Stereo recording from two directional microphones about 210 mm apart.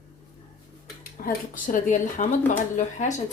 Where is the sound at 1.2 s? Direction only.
40° left (ahead or behind).